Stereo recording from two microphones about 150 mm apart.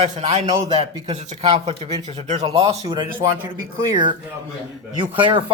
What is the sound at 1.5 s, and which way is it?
A man's voice, 35° right (ahead or behind).